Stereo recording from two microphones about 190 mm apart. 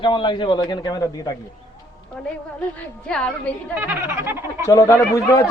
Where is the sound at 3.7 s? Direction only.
10° right (ahead or behind).